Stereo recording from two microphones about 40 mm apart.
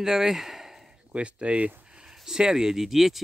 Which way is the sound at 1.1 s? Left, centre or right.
Right.